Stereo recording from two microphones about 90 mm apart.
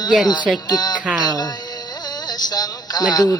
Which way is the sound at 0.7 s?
50° left (ahead or behind).